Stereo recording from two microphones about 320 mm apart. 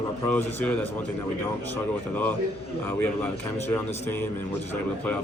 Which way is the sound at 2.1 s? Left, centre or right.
Centre.